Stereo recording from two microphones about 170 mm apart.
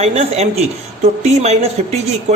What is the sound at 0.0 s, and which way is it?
A man's voice, 40° right (ahead or behind).